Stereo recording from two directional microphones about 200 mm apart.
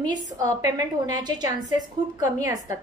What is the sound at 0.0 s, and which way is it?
A woman's voice, 20° right (ahead or behind).